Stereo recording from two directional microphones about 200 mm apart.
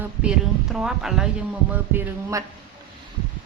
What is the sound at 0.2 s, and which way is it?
Music, 5° right (ahead or behind).